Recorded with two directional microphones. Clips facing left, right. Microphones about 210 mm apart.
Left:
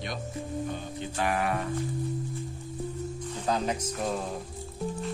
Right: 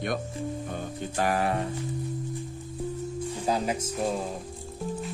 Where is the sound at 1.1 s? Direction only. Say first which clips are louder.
Right 2 dB; 40° right (ahead or behind).